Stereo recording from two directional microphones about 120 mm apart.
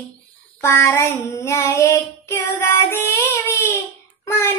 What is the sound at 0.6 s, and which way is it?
Child singing, 25° left (ahead or behind).